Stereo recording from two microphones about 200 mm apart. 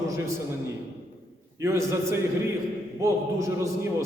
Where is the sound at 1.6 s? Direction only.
15° right (ahead or behind).